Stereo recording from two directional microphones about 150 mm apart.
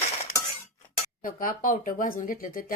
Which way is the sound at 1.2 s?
65° left (ahead or behind).